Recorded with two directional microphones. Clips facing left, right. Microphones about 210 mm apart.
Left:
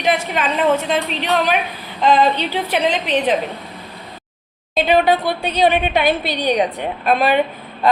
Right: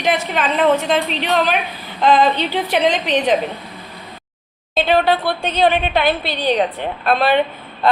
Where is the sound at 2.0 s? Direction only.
10° left (ahead or behind).